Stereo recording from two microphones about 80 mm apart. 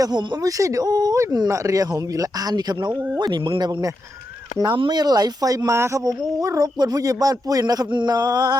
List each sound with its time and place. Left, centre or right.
0.0 s speech: right
4.7 s speech: right